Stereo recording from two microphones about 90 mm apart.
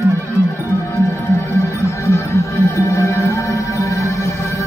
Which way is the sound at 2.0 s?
35° left (ahead or behind).